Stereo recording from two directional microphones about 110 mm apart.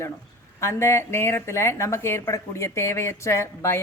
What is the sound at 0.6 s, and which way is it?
Speech, 25° left (ahead or behind).